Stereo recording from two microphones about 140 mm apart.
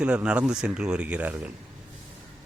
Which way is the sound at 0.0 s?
10° right (ahead or behind).